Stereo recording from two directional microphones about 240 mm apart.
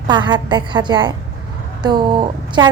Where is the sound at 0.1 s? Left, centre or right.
Centre.